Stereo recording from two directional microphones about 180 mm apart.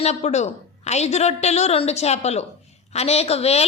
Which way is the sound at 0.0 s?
40° left (ahead or behind).